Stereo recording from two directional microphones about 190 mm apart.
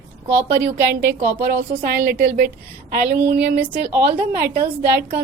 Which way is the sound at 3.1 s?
55° right (ahead or behind).